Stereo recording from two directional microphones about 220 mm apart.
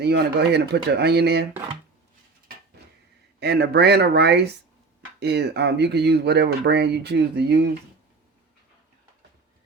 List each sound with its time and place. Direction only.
0.0 s speech: 45° right (ahead or behind)
3.4 s speech: 50° right (ahead or behind)